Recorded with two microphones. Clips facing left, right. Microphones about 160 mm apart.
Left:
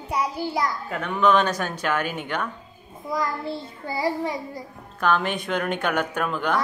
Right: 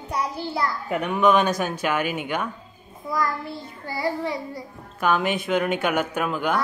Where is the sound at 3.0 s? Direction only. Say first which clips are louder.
Even; 25° left (ahead or behind).